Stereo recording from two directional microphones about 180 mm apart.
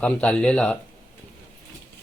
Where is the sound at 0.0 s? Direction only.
5° left (ahead or behind).